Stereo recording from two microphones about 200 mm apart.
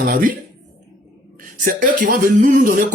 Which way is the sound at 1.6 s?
45° right (ahead or behind).